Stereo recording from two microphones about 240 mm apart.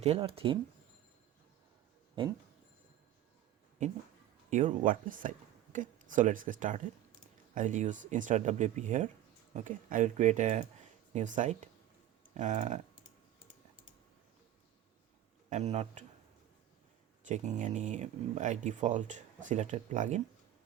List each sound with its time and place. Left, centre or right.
0.0 s speech: right
4.4 s speech: right
15.4 s speech: right
17.2 s speech: right